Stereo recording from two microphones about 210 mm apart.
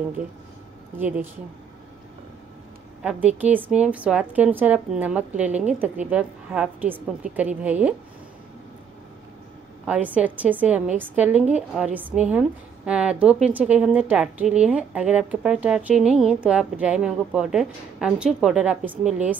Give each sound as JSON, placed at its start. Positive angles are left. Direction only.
{"t": 0.9, "sound": "a woman's voice", "side_deg": -10}
{"t": 3.0, "sound": "a woman's voice", "side_deg": -5}
{"t": 9.8, "sound": "a woman's voice", "side_deg": -5}